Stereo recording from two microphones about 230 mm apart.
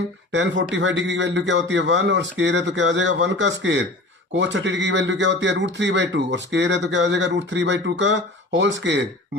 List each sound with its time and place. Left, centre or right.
0.3 s speech: right